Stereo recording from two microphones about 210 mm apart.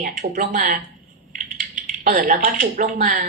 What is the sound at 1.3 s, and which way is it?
Dishes, 40° right (ahead or behind).